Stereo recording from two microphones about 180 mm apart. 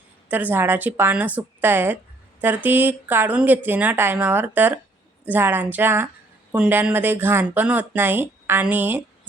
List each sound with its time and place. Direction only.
0.3 s speech: 10° right (ahead or behind)